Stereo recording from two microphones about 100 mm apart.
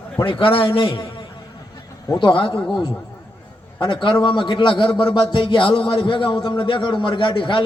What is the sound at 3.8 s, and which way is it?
A man's voice, 55° left (ahead or behind).